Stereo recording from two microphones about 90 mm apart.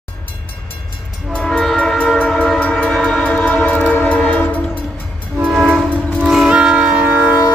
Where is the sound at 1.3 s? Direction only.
10° left (ahead or behind).